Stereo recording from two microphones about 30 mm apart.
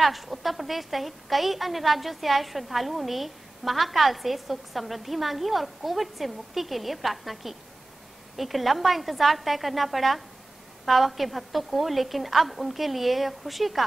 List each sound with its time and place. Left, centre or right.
0.0 s a woman's voice: centre